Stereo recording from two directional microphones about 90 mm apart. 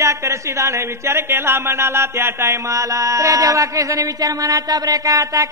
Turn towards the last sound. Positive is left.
turn(degrees=-45)  # may be behind; listen again after turning